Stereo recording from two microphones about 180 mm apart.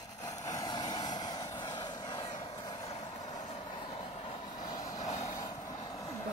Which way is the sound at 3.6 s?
25° left (ahead or behind).